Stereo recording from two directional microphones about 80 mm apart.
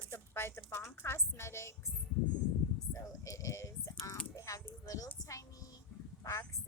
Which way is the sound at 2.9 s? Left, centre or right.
Left.